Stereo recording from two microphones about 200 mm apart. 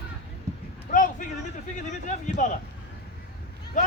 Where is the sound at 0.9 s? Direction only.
40° left (ahead or behind).